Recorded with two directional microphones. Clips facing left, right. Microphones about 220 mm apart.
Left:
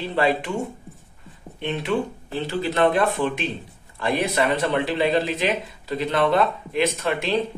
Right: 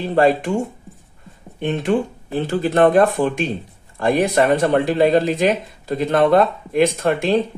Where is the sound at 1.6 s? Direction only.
45° right (ahead or behind).